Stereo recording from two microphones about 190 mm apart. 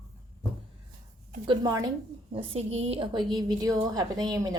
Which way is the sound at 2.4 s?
30° right (ahead or behind).